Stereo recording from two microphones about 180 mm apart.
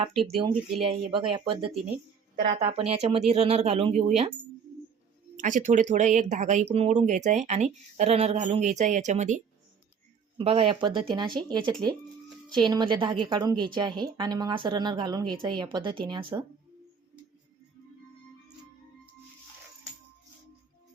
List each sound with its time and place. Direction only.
0.4 s speech: 30° right (ahead or behind)
5.4 s speech: 45° right (ahead or behind); by 16.4 s 25° right (ahead or behind)